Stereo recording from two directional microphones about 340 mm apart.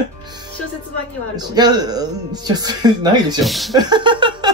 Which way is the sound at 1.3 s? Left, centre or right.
Centre.